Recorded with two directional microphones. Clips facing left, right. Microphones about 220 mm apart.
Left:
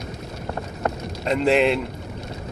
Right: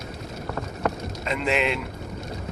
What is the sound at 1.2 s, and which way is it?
Speech, 40° left (ahead or behind).